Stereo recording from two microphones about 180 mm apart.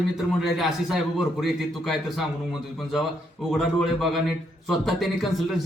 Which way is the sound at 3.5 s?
Centre (ahead or behind).